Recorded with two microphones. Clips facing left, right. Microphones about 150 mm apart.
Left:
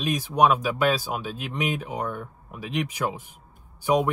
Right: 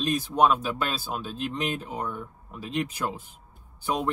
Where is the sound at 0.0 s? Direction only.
10° left (ahead or behind).